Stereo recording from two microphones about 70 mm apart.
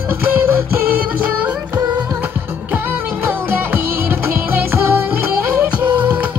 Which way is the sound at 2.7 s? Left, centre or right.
Right.